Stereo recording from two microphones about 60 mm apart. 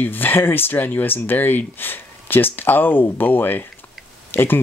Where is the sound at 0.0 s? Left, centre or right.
Left.